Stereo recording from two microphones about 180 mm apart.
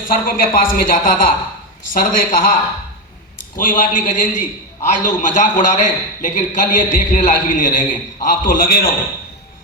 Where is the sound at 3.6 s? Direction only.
45° left (ahead or behind).